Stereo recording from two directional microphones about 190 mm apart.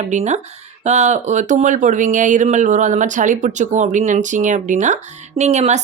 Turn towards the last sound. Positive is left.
turn(degrees=-35)  # may be behind; listen again after turning